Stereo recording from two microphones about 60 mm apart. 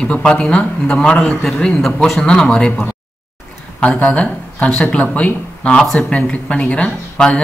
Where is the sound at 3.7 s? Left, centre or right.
Left.